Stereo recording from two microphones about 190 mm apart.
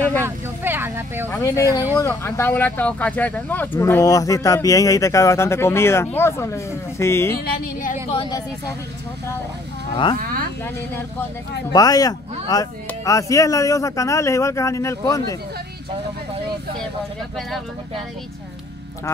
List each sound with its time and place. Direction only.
0.2 s speech: 10° right (ahead or behind)
1.3 s speech: 15° left (ahead or behind)
7.4 s speech: 55° left (ahead or behind)
8.1 s speech: 25° left (ahead or behind)
11.7 s speech: 20° left (ahead or behind)